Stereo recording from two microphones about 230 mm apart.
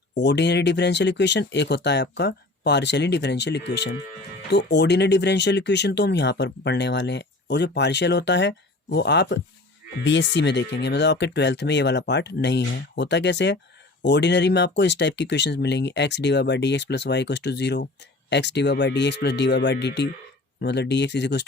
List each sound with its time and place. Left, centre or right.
0.1 s speech: left